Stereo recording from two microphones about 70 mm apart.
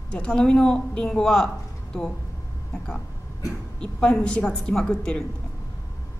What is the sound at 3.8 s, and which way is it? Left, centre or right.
Speech, centre.